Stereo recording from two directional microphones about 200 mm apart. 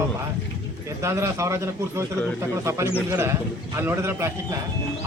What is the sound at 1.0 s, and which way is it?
Speech, 15° right (ahead or behind).